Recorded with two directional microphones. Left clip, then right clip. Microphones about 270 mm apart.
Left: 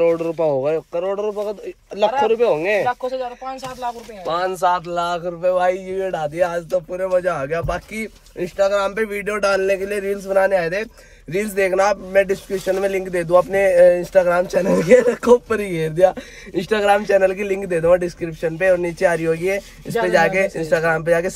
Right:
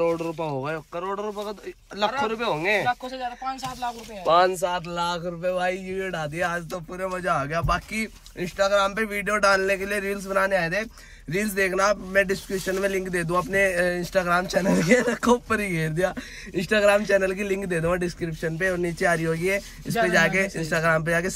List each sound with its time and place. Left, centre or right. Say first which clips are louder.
0.1 s speech: left 9 dB; centre
0.9 s speech: left 8 dB; right
2.0 s speech: left 9 dB; centre
4.3 s a man's voice: left 1 dB; centre